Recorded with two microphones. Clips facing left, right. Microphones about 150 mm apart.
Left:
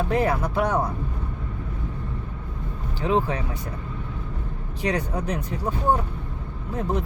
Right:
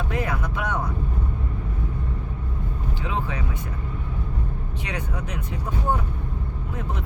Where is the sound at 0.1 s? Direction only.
35° left (ahead or behind).